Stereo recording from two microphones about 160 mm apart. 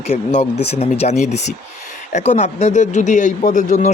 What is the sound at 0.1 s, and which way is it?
A woman's voice, 40° left (ahead or behind).